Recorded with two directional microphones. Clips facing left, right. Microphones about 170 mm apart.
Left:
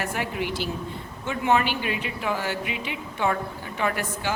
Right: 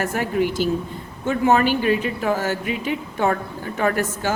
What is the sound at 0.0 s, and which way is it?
A woman's voice, 45° right (ahead or behind).